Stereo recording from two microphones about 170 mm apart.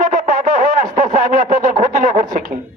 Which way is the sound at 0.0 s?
50° right (ahead or behind).